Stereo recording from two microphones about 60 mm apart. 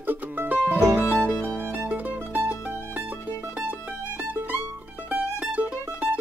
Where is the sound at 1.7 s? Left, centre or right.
Right.